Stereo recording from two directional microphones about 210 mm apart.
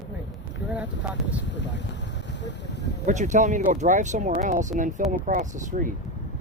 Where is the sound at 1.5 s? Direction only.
60° left (ahead or behind).